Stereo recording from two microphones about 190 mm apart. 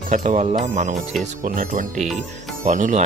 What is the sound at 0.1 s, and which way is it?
Speech, 40° right (ahead or behind).